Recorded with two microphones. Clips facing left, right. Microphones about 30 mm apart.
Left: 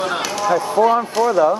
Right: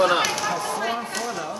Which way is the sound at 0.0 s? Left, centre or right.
Centre.